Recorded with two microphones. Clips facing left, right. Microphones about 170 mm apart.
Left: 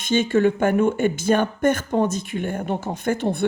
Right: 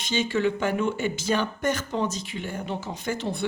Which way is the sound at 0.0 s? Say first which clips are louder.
Left 6 dB; 50° left (ahead or behind).